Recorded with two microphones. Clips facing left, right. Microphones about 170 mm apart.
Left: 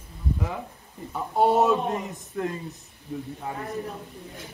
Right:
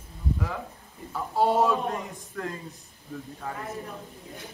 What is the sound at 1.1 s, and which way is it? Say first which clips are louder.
Speech: left 2 dB; 20° left (ahead or behind).